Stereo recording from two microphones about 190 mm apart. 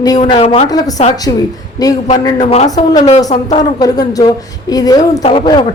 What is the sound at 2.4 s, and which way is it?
Speech, 35° left (ahead or behind).